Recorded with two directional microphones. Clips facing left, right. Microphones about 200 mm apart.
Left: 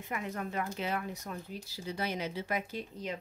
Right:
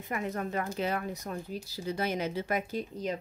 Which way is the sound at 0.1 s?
40° right (ahead or behind).